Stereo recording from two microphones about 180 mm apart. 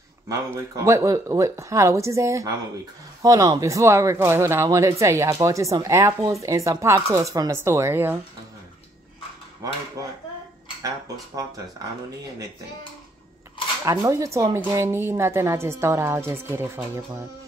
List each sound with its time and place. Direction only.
0.3 s speech: 15° right (ahead or behind)
9.6 s speech: 20° right (ahead or behind)
13.8 s speech: 15° right (ahead or behind)